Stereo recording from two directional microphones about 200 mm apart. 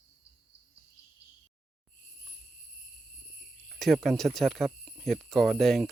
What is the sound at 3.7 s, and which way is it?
Speech, centre (ahead or behind).